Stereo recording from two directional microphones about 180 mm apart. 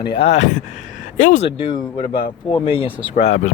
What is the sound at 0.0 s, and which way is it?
Speech, 30° left (ahead or behind).